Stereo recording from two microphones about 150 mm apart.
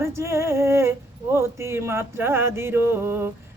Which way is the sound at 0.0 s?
20° right (ahead or behind).